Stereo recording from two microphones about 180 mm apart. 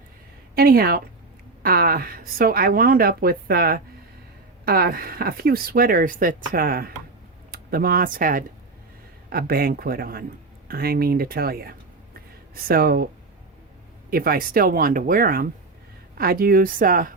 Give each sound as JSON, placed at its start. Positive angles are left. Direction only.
{"t": 0.5, "sound": "speech", "side_deg": -55}
{"t": 14.1, "sound": "a woman's voice", "side_deg": -55}